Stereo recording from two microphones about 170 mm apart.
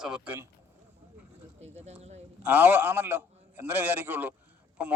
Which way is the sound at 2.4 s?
10° right (ahead or behind).